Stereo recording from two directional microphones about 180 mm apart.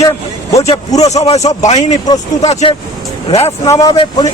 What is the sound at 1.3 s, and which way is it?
A man's voice, 40° left (ahead or behind).